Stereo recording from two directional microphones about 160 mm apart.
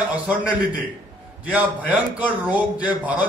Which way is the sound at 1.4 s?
10° right (ahead or behind).